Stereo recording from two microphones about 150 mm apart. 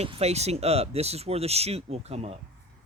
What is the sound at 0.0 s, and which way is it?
Speech, 45° right (ahead or behind).